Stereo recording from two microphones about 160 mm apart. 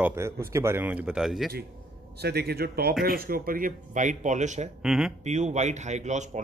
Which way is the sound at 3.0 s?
65° right (ahead or behind).